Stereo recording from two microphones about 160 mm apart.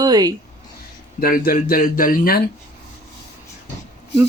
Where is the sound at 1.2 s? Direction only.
65° left (ahead or behind).